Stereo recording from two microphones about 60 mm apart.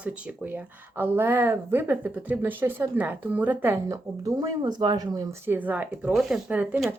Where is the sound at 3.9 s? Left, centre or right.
Right.